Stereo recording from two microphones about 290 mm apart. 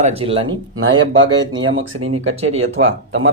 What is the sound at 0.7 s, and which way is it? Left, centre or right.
Speech, right.